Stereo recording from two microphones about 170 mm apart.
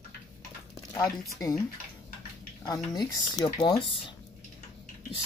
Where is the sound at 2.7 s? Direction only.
25° left (ahead or behind).